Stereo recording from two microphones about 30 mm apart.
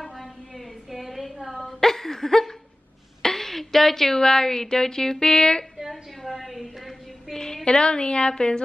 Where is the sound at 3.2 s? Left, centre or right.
Centre.